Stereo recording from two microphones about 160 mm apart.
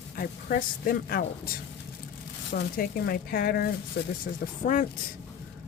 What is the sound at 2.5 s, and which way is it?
Speech, 70° left (ahead or behind).